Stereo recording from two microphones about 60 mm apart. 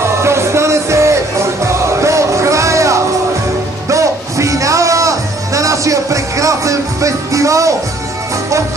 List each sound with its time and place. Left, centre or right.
0.1 s music: right